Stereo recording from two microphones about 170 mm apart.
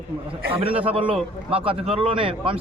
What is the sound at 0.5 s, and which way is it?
A man's voice, 35° right (ahead or behind).